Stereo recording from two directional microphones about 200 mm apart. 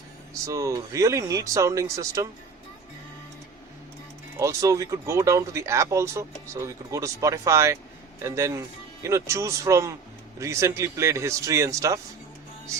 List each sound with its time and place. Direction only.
0.4 s speech: 15° right (ahead or behind)
4.4 s speech: 15° right (ahead or behind)